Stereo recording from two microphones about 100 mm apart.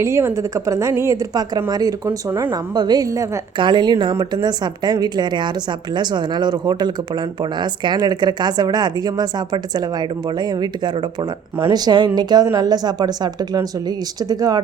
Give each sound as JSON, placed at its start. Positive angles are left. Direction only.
{"t": 0.0, "sound": "a woman's voice", "side_deg": -30}
{"t": 2.0, "sound": "speech", "side_deg": -25}
{"t": 2.5, "sound": "speech", "side_deg": -45}
{"t": 3.6, "sound": "a woman's voice", "side_deg": -50}